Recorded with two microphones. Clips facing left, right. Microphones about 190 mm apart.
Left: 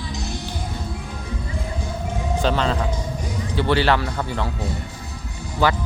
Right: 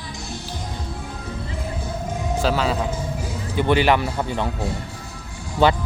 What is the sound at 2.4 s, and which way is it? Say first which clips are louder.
Speech: even; 5° right (ahead or behind).